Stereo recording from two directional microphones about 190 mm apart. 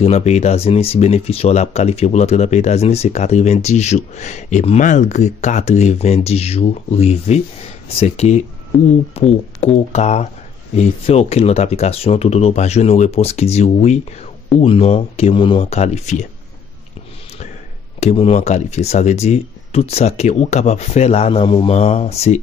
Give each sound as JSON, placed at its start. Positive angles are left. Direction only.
{"t": 0.0, "sound": "speech", "side_deg": 35}
{"t": 18.0, "sound": "speech", "side_deg": 35}